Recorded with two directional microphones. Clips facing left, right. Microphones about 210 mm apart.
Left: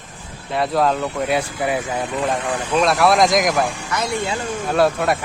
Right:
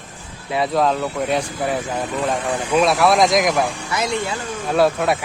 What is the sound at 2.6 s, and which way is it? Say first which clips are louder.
Speech: even; 5° right (ahead or behind).